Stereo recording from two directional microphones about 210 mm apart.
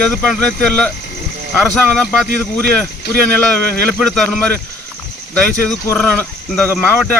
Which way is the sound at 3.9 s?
5° left (ahead or behind).